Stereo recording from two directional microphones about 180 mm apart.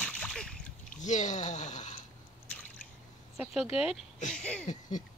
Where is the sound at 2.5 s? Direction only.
5° left (ahead or behind).